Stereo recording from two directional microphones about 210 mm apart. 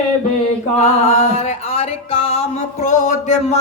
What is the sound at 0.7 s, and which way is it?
Music, 30° left (ahead or behind).